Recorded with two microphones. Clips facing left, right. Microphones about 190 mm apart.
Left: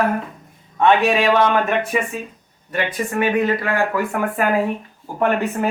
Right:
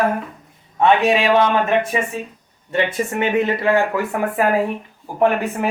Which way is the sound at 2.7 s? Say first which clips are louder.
Right 3 dB; 25° right (ahead or behind).